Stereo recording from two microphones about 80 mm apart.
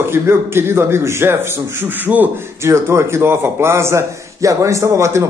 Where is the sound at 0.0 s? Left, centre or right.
Right.